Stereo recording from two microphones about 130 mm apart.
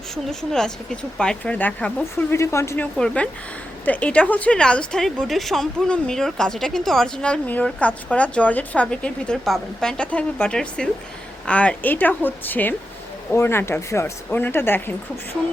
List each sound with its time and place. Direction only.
0.3 s a woman's voice: 5° left (ahead or behind)